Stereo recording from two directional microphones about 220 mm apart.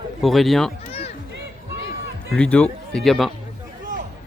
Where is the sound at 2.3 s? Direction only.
5° left (ahead or behind).